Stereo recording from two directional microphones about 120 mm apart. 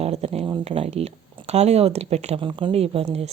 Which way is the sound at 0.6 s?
55° right (ahead or behind).